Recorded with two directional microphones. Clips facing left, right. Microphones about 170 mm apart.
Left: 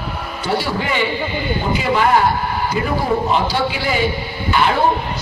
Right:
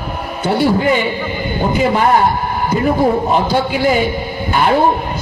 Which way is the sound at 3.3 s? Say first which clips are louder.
Right 4 dB; 50° right (ahead or behind).